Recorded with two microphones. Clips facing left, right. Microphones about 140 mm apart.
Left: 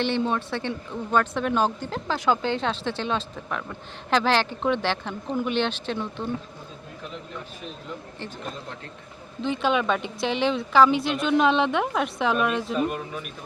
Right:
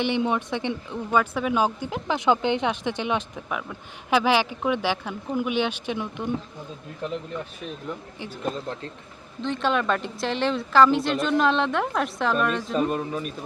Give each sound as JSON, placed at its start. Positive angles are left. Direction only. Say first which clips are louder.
{"t": 0.0, "sound": "a woman's voice", "louder": "right 1 dB", "side_deg": -15}
{"t": 9.4, "sound": "a woman's voice", "louder": "left 1 dB", "side_deg": 0}
{"t": 12.7, "sound": "speech", "louder": "right 2 dB", "side_deg": -35}